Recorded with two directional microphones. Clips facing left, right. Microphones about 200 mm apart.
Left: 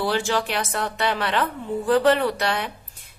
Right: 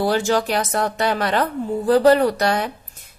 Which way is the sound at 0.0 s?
45° right (ahead or behind).